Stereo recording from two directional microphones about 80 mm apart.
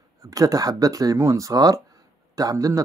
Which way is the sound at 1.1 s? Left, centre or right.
Right.